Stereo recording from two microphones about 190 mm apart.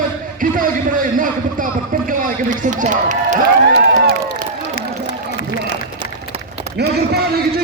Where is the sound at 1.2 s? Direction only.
45° right (ahead or behind).